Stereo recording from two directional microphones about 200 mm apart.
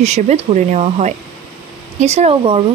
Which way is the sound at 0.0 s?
35° right (ahead or behind).